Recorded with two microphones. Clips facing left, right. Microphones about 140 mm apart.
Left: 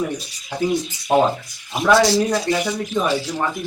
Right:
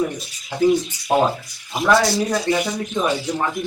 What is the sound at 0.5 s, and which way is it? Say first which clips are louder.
Speech: right 4 dB; centre (ahead or behind).